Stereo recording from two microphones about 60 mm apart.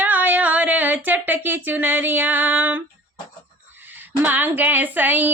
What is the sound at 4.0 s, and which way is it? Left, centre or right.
Speech, right.